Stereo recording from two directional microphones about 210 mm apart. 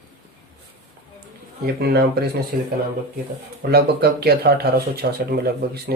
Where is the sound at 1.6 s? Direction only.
50° right (ahead or behind).